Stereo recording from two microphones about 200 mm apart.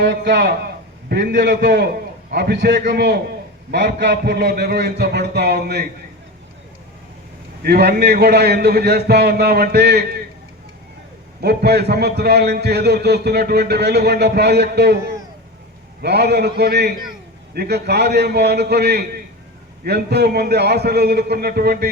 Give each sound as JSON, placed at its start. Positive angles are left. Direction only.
{"t": 0.0, "sound": "a man's voice", "side_deg": -60}
{"t": 7.6, "sound": "a man's voice", "side_deg": -55}
{"t": 11.3, "sound": "a man's voice", "side_deg": -55}